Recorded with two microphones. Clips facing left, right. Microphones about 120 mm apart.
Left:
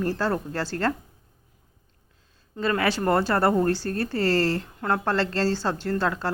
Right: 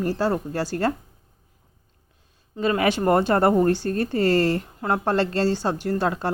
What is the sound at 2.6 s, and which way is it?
A woman's voice, 15° right (ahead or behind).